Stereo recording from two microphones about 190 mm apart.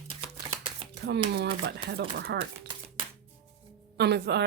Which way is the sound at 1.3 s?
60° right (ahead or behind).